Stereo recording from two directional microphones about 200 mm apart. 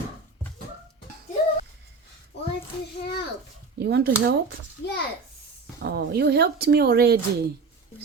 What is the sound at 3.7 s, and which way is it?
Speech, 55° right (ahead or behind).